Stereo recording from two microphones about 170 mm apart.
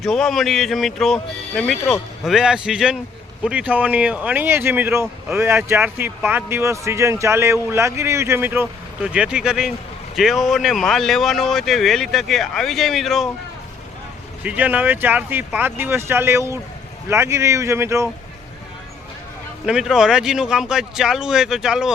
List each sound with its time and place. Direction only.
0.0 s speech: centre (ahead or behind)
14.4 s speech: 10° right (ahead or behind)
19.6 s speech: 5° right (ahead or behind)